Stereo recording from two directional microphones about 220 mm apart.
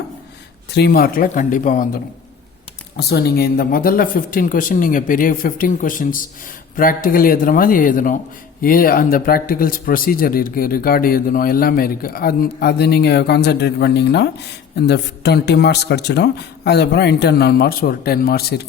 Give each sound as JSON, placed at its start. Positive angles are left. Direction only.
{"t": 0.7, "sound": "speech", "side_deg": 45}
{"t": 3.0, "sound": "speech", "side_deg": 45}